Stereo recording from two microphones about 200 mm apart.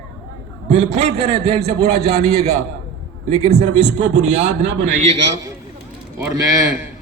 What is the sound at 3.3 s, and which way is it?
Speech, 30° right (ahead or behind).